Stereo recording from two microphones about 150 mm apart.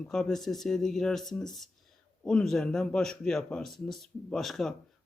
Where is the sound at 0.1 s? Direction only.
5° left (ahead or behind).